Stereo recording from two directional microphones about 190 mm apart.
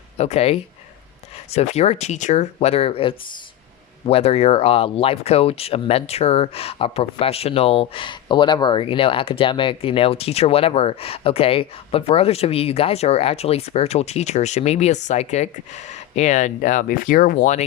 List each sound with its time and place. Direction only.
0.2 s speech: 35° left (ahead or behind)